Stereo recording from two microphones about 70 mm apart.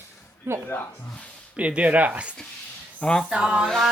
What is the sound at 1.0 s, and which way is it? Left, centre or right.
Speech, centre.